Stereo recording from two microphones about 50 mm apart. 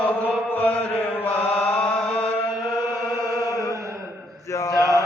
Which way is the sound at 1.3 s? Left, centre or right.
Left.